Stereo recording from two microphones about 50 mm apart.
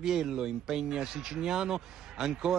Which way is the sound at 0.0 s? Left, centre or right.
Centre.